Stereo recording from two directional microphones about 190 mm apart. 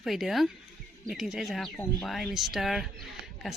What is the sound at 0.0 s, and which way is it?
Speech, centre (ahead or behind).